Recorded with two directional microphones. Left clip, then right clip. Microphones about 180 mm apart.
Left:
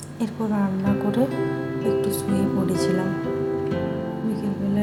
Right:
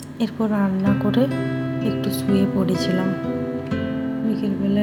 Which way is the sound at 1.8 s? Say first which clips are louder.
Left 3 dB; 15° right (ahead or behind).